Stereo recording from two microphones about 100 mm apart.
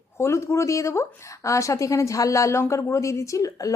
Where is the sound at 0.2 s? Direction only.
30° left (ahead or behind).